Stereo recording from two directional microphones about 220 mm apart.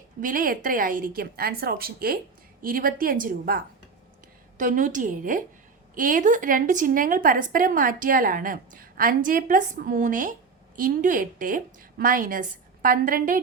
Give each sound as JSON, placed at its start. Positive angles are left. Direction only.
{"t": 0.2, "sound": "a woman's voice", "side_deg": -40}